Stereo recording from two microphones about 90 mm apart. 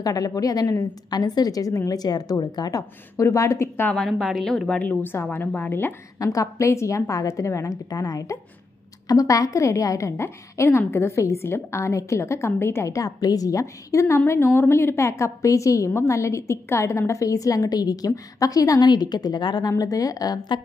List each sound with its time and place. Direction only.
0.0 s a woman's voice: 45° left (ahead or behind)
3.2 s a woman's voice: 35° left (ahead or behind)
3.9 s a woman's voice: 5° left (ahead or behind)
4.7 s a woman's voice: 20° left (ahead or behind)
6.1 s a woman's voice: 40° left (ahead or behind)